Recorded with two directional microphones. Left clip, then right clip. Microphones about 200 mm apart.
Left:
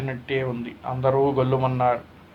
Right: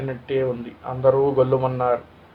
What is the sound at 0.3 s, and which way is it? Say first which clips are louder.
Speech: right 4 dB; 30° left (ahead or behind).